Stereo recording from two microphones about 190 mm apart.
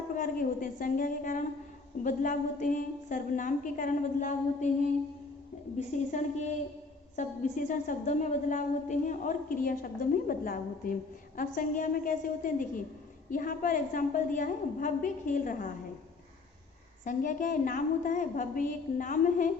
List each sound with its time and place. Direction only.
0.1 s a woman's voice: 45° left (ahead or behind)
5.7 s a woman's voice: 40° left (ahead or behind)
17.0 s a woman's voice: 45° left (ahead or behind)